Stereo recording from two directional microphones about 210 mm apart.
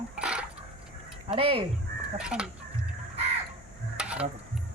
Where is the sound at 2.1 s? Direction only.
5° right (ahead or behind).